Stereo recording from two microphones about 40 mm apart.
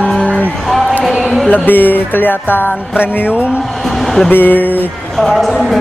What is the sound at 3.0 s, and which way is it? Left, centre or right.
Speech, left.